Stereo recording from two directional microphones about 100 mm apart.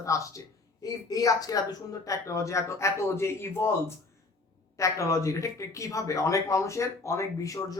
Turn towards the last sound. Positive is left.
turn(degrees=35)  # may be behind; listen again after turning